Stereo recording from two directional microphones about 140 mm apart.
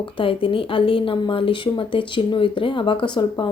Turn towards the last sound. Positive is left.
turn(degrees=35)  # may be behind; listen again after turning